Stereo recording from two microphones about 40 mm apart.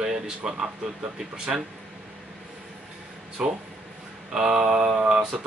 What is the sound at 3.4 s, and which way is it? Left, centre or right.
Speech, centre.